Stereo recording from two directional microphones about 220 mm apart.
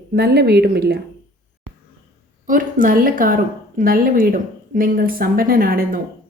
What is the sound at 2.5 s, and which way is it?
A woman's voice, 40° right (ahead or behind).